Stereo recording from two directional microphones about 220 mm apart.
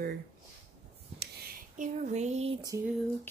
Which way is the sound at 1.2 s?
40° right (ahead or behind).